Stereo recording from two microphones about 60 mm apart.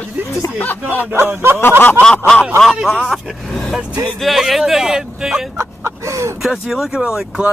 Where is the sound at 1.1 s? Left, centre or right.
Right.